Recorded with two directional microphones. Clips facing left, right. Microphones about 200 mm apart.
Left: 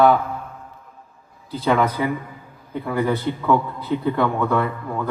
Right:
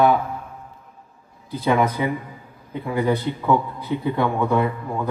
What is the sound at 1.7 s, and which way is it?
A man's voice, 20° right (ahead or behind).